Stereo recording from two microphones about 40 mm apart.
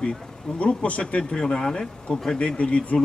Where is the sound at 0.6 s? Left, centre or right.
Left.